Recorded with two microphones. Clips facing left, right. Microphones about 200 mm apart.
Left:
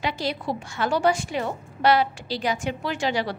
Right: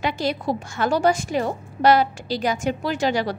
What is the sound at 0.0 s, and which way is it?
A woman's voice, 45° right (ahead or behind).